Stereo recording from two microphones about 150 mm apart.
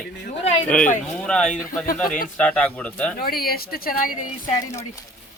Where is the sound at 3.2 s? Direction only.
90° left; by 4.1 s 70° left (ahead or behind).